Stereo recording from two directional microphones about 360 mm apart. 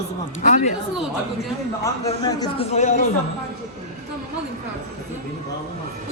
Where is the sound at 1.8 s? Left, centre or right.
Centre.